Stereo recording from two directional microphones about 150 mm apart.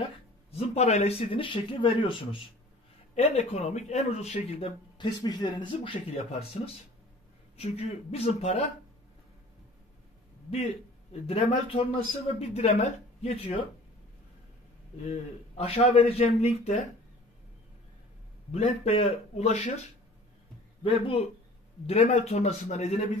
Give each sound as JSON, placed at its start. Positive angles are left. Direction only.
{"t": 0.6, "sound": "a man's voice", "side_deg": 45}
{"t": 11.2, "sound": "a man's voice", "side_deg": 40}
{"t": 15.0, "sound": "a man's voice", "side_deg": 40}
{"t": 18.5, "sound": "a man's voice", "side_deg": 45}
{"t": 20.8, "sound": "a man's voice", "side_deg": 40}